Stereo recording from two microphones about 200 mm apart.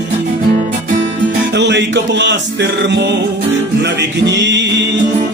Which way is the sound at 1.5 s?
60° right (ahead or behind).